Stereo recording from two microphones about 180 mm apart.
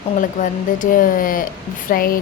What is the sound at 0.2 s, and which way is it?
A woman's voice, 45° left (ahead or behind).